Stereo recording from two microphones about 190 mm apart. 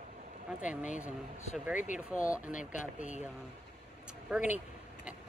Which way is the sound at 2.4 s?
40° left (ahead or behind).